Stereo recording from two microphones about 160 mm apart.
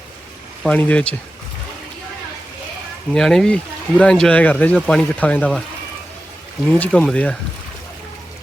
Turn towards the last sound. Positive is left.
turn(degrees=5)  # may be behind; listen again after turning